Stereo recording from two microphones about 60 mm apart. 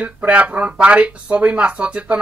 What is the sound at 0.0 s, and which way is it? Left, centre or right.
Speech, right.